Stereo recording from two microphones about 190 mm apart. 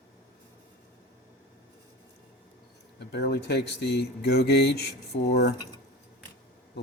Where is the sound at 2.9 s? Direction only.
60° left (ahead or behind).